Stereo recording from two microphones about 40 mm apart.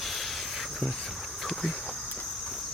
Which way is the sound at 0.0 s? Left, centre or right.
Centre.